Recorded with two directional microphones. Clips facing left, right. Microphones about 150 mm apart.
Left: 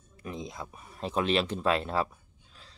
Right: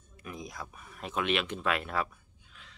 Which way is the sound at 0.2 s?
25° left (ahead or behind).